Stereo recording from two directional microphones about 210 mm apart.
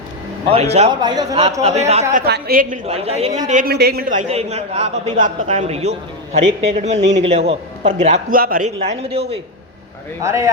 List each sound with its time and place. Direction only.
0.5 s a man's voice: 30° right (ahead or behind)
1.6 s a man's voice: 30° right (ahead or behind)
2.2 s a woman's voice: 45° right (ahead or behind)
2.8 s a man's voice: 30° right (ahead or behind)
10.2 s speech: 15° right (ahead or behind)